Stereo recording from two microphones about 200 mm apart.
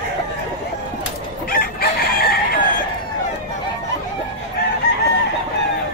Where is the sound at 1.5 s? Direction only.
50° left (ahead or behind).